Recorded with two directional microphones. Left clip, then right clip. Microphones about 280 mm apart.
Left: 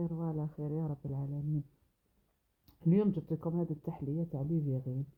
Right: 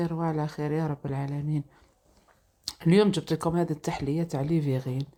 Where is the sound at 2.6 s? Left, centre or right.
Centre.